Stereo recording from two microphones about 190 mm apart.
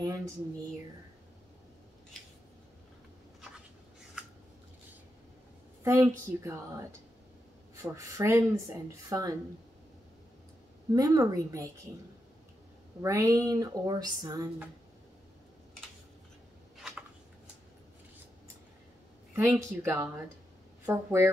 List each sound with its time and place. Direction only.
5.9 s speech: 15° right (ahead or behind)
10.9 s speech: 20° right (ahead or behind)
13.0 s speech: 15° right (ahead or behind)
16.7 s a sound: 5° right (ahead or behind)
19.3 s speech: 15° right (ahead or behind)